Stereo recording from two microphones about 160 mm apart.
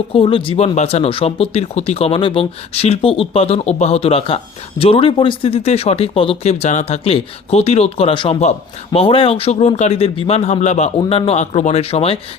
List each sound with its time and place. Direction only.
0.1 s speech: 35° left (ahead or behind)